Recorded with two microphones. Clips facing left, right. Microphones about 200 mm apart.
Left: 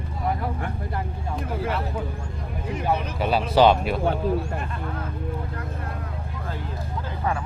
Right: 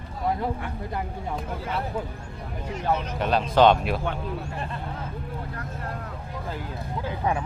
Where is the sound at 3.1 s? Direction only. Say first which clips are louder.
Left 1 dB; 5° left (ahead or behind).